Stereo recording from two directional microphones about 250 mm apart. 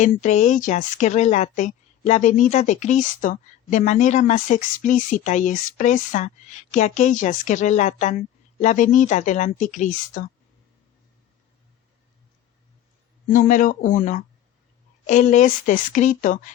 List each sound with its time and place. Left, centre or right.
0.0 s a woman's voice: left
13.3 s a woman's voice: left